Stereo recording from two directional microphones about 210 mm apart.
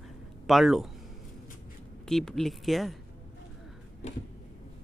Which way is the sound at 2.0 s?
Centre (ahead or behind).